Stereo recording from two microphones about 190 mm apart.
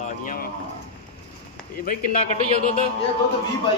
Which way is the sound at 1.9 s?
35° left (ahead or behind).